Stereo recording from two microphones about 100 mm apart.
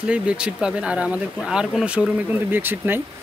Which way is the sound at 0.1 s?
10° right (ahead or behind).